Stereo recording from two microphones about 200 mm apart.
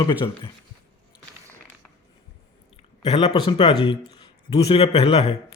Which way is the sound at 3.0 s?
30° left (ahead or behind).